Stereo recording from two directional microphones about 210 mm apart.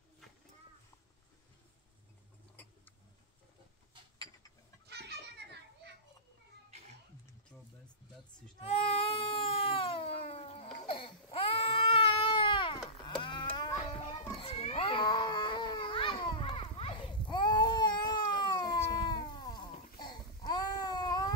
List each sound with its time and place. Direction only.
4.8 s children playing: 55° right (ahead or behind)
8.5 s baby cry: 30° left (ahead or behind)
13.0 s livestock: 25° left (ahead or behind)
14.4 s cat: 30° left (ahead or behind)